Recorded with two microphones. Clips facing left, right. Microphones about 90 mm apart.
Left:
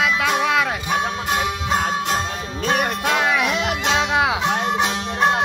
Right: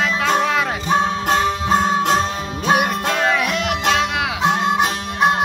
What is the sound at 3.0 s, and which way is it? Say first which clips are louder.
Music: right 1 dB; 10° left (ahead or behind).